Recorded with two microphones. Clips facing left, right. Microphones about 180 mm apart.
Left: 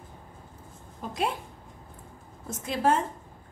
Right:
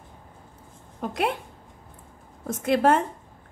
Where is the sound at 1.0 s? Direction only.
65° right (ahead or behind).